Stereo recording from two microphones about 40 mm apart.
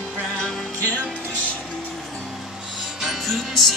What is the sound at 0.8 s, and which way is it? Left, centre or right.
Music, left.